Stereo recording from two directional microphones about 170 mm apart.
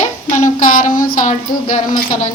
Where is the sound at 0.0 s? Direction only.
45° left (ahead or behind).